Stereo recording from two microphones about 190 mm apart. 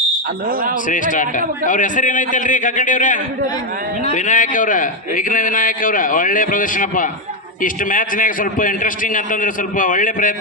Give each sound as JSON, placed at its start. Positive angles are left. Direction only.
{"t": 0.9, "sound": "a man's voice", "side_deg": 45}